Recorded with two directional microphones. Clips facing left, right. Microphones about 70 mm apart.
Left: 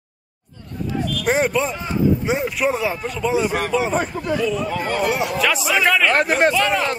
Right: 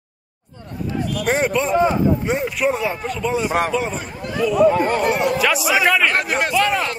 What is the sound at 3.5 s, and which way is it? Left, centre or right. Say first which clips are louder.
Speech: right 3 dB; right.